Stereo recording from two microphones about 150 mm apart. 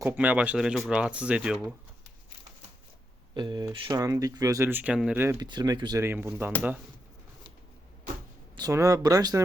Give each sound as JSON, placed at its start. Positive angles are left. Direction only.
{"t": 0.0, "sound": "speech", "side_deg": -10}
{"t": 3.3, "sound": "speech", "side_deg": -30}
{"t": 5.4, "sound": "speech", "side_deg": -25}
{"t": 6.0, "sound": "speech", "side_deg": -15}
{"t": 8.5, "sound": "speech", "side_deg": -25}